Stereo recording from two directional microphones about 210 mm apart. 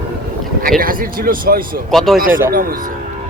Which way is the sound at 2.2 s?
40° right (ahead or behind).